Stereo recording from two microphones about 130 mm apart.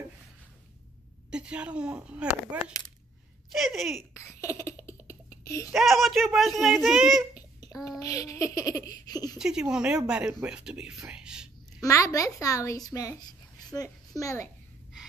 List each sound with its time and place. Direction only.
1.3 s a child's voice: 10° right (ahead or behind)
4.2 s a sound: 20° left (ahead or behind)
5.7 s a child's voice: centre (ahead or behind)
7.3 s babbling: 25° left (ahead or behind)
8.0 s speech: 25° left (ahead or behind)
9.4 s speech: 5° right (ahead or behind)
11.8 s a child's voice: 25° left (ahead or behind)